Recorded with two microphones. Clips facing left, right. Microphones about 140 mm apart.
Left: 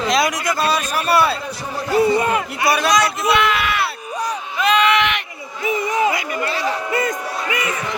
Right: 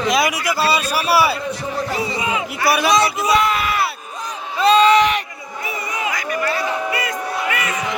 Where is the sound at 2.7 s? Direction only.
5° right (ahead or behind).